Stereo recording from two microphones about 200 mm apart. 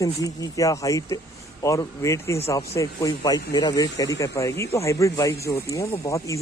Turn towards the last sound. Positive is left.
turn(degrees=15)  # may be behind; listen again after turning